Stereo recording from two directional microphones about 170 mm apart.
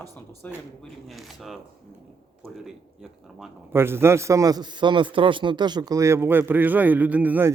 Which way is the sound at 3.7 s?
15° right (ahead or behind).